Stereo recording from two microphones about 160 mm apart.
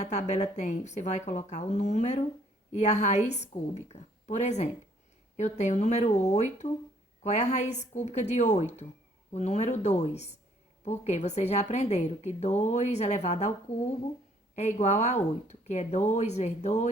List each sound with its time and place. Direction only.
0.0 s a woman's voice: 45° left (ahead or behind)
14.5 s a woman's voice: 45° left (ahead or behind)